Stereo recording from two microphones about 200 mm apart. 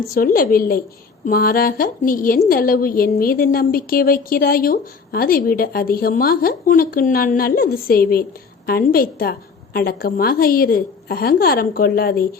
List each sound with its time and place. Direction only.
0.1 s a woman's voice: 45° left (ahead or behind)